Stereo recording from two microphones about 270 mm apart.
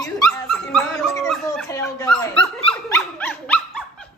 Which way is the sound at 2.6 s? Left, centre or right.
Left.